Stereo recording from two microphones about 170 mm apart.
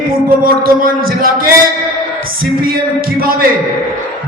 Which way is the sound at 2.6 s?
60° right (ahead or behind).